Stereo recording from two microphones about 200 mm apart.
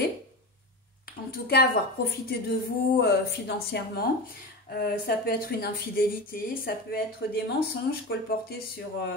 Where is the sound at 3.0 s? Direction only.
55° left (ahead or behind).